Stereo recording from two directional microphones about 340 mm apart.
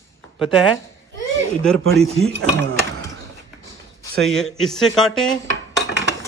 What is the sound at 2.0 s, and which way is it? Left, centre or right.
Mechanisms, centre.